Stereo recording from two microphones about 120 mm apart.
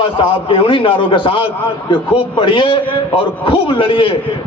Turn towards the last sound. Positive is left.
turn(degrees=45)  # may be behind; listen again after turning